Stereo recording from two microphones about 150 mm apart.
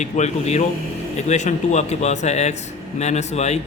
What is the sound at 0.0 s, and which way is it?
A man's voice, 50° left (ahead or behind).